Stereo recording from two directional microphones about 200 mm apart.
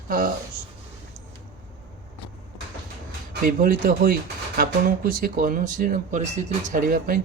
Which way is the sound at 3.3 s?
45° right (ahead or behind).